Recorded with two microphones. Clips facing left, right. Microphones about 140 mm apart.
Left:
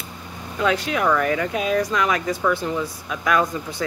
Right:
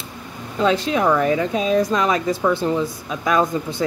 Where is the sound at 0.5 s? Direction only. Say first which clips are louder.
Right 3 dB; 30° right (ahead or behind).